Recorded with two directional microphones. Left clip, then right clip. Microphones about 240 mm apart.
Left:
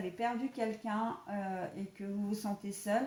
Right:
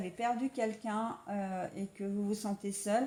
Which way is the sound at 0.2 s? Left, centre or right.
Right.